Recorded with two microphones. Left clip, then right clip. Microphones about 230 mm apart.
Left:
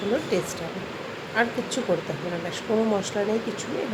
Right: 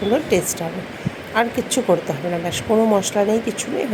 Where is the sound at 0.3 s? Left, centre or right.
Centre.